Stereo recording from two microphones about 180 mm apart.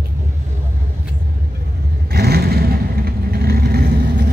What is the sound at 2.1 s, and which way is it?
Vehicle, 60° right (ahead or behind).